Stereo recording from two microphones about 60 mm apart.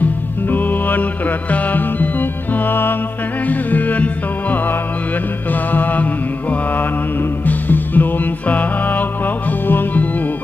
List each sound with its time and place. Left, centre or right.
0.0 s music: left
6.5 s mantra: left
7.4 s music: left